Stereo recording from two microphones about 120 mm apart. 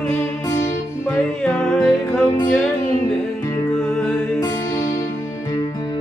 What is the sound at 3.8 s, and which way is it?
Music, 5° left (ahead or behind).